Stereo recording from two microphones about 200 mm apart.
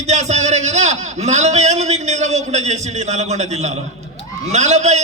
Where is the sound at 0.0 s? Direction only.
35° right (ahead or behind).